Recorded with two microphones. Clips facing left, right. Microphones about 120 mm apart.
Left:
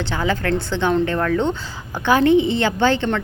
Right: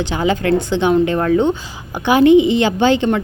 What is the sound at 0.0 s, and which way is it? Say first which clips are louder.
Speech: right 4 dB; 20° right (ahead or behind).